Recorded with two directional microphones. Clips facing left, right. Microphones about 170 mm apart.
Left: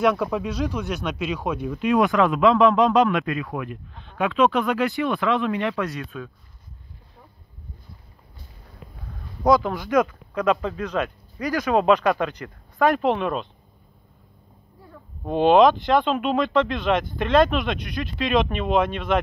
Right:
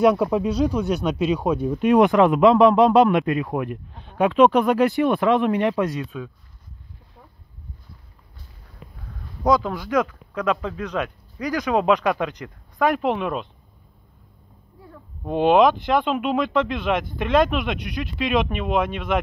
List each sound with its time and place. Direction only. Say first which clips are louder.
0.0 s speech: right 4 dB; 30° right (ahead or behind)
2.0 s a man's voice: right 3 dB; 20° right (ahead or behind)
3.4 s speech: right 5 dB; 40° right (ahead or behind)
5.9 s speech: right 3 dB; 15° right (ahead or behind)
9.4 s speech: left 1 dB; 5° left (ahead or behind)
11.5 s speech: left 1 dB; 15° right (ahead or behind)
12.7 s speech: left 1 dB; centre (ahead or behind)
15.2 s speech: left 1 dB; 10° right (ahead or behind)